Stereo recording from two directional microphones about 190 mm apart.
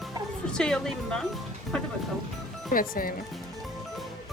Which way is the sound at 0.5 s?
5° left (ahead or behind).